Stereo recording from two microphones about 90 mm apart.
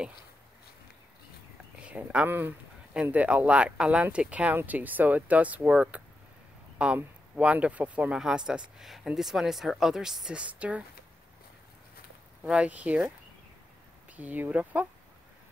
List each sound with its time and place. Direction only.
1.9 s speech: 15° right (ahead or behind)
12.4 s speech: 15° right (ahead or behind)
14.1 s speech: 20° right (ahead or behind)